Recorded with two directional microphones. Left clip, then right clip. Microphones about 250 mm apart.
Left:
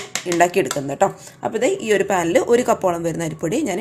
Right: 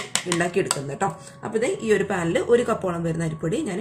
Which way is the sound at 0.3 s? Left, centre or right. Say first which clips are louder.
Left 8 dB; left.